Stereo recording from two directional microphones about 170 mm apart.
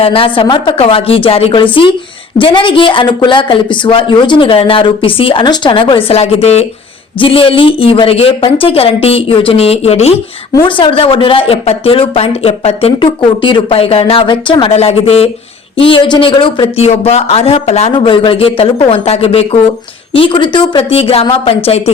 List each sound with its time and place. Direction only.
0.0 s speech: 35° left (ahead or behind)